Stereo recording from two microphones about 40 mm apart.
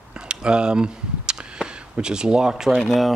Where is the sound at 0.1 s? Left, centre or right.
Right.